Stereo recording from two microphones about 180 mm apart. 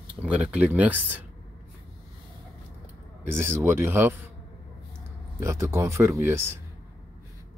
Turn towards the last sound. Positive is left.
turn(degrees=-15)  # may be behind; listen again after turning